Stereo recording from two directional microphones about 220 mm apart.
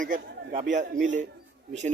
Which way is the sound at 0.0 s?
35° right (ahead or behind).